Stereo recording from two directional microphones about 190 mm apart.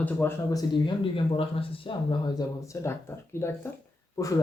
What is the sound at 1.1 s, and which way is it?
Speech, 30° left (ahead or behind).